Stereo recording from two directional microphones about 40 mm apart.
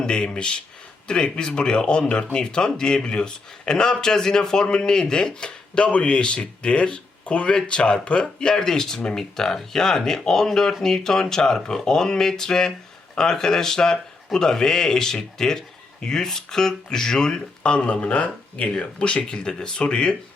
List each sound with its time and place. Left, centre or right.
0.0 s a man's voice: left